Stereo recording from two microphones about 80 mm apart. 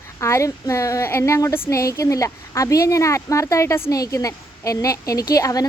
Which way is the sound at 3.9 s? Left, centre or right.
Left.